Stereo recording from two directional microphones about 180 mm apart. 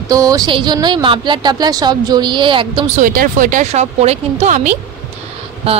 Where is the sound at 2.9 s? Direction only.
50° right (ahead or behind).